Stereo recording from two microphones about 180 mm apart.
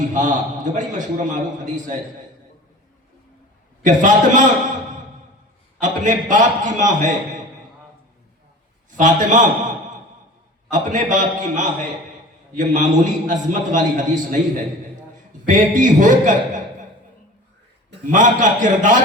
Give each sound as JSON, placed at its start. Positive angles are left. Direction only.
{"t": 0.1, "sound": "a man's voice", "side_deg": -45}
{"t": 3.8, "sound": "a man's voice", "side_deg": -45}
{"t": 5.8, "sound": "a man's voice", "side_deg": -45}
{"t": 8.9, "sound": "a man's voice", "side_deg": -45}
{"t": 10.7, "sound": "a man's voice", "side_deg": -45}
{"t": 18.1, "sound": "a man's voice", "side_deg": -45}